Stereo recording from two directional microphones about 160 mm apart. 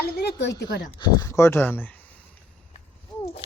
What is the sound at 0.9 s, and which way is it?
Speech, 20° left (ahead or behind).